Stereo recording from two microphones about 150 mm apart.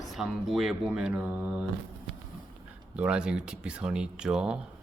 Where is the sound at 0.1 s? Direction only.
Centre (ahead or behind).